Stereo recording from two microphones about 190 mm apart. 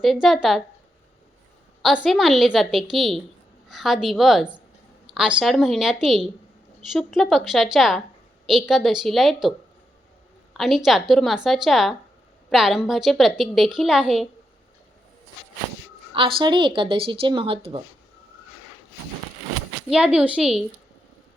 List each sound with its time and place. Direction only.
0.0 s a woman's voice: centre (ahead or behind)
1.8 s a woman's voice: centre (ahead or behind)
16.1 s speech: 25° right (ahead or behind)
19.9 s a woman's voice: 5° right (ahead or behind)